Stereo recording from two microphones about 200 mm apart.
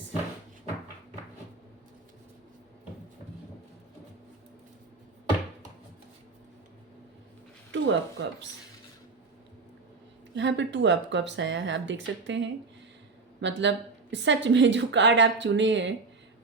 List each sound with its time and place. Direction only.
7.7 s speech: 65° right (ahead or behind)
10.3 s a woman's voice: 65° right (ahead or behind)